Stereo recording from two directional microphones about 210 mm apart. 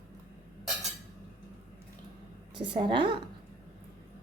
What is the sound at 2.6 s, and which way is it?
Speech, 25° right (ahead or behind).